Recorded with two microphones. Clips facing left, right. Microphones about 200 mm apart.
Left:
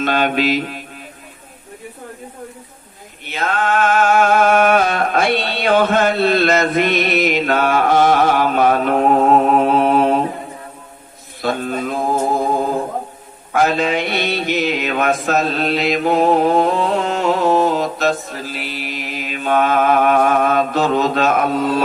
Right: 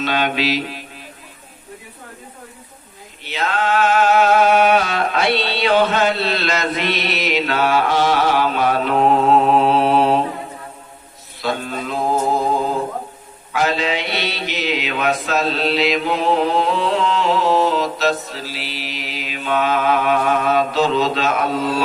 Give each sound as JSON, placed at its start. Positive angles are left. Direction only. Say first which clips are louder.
{"t": 0.0, "sound": "mantra", "louder": "left 3 dB", "side_deg": 50}
{"t": 3.2, "sound": "mantra", "louder": "left 1 dB", "side_deg": 50}
{"t": 11.4, "sound": "mantra", "louder": "left 3 dB", "side_deg": 50}
{"t": 13.5, "sound": "mantra", "louder": "left 3 dB", "side_deg": 50}